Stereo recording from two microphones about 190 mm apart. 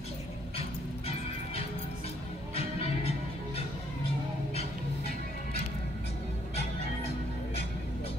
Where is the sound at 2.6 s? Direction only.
30° left (ahead or behind).